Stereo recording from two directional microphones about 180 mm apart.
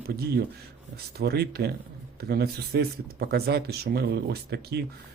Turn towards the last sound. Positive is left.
turn(degrees=-65)  # may be behind; listen again after turning